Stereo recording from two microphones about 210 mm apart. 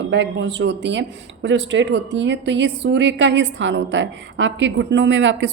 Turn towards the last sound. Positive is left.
turn(degrees=-60)  # may be behind; listen again after turning